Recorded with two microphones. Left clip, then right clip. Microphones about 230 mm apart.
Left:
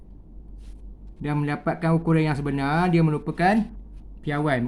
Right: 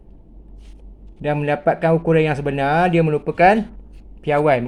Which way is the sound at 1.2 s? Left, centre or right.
Left.